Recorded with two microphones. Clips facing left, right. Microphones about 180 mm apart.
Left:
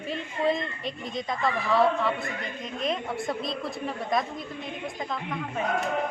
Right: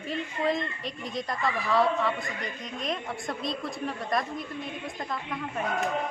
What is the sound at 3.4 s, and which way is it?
Speech, centre (ahead or behind).